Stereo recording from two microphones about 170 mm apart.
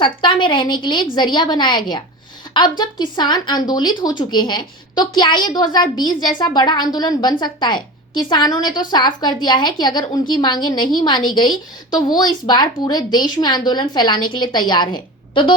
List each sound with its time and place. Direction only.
0.0 s a woman's voice: 30° left (ahead or behind)